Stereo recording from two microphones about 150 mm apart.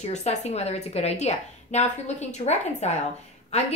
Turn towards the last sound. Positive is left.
turn(degrees=45)  # may be behind; listen again after turning